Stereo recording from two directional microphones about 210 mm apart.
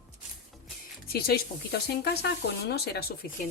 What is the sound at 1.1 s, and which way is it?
A woman's voice, 45° left (ahead or behind).